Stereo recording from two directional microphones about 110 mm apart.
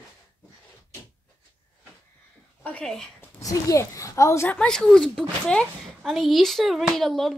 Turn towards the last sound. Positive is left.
turn(degrees=0)  # may be behind; listen again after turning